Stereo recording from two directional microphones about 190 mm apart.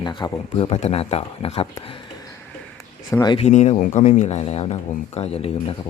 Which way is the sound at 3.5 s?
35° left (ahead or behind).